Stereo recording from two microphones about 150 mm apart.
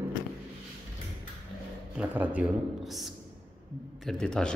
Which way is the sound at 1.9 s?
10° right (ahead or behind).